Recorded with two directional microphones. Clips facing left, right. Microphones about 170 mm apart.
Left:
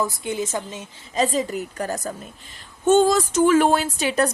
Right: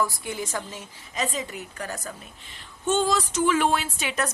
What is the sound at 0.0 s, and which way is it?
Speech, 20° left (ahead or behind).